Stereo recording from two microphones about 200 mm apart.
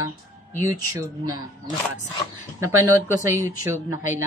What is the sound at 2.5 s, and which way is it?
Speech, 15° right (ahead or behind).